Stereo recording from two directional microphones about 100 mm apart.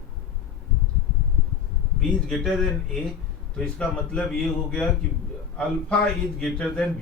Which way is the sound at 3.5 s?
10° left (ahead or behind).